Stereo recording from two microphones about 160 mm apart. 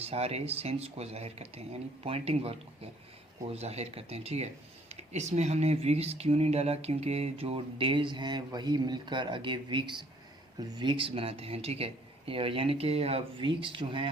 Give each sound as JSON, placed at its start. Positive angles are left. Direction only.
{"t": 0.0, "sound": "speech", "side_deg": -40}